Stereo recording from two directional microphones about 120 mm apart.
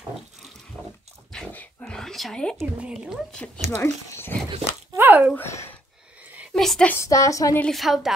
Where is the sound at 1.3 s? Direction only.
10° left (ahead or behind).